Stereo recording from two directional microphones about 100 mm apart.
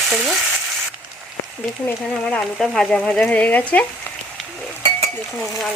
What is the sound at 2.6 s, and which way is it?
Frying, 5° left (ahead or behind).